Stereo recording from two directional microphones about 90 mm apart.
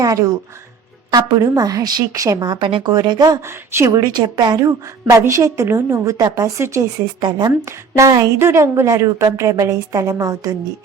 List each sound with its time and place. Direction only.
0.0 s a woman's voice: 40° right (ahead or behind)
2.6 s speech: 70° right (ahead or behind)
2.8 s a woman's voice: 50° right (ahead or behind)
3.4 s speech: 30° right (ahead or behind)
3.9 s a woman's voice: 50° right (ahead or behind)
5.0 s a woman's voice: 35° right (ahead or behind)
7.2 s speech: 55° right (ahead or behind)
7.6 s a woman's voice: 35° right (ahead or behind)